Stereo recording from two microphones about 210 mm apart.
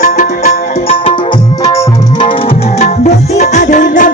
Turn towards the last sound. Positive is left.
turn(degrees=35)  # may be behind; listen again after turning